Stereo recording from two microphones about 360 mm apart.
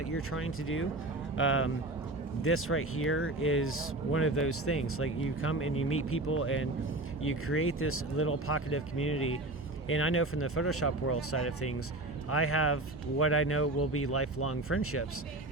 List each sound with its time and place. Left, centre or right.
0.0 s speech: left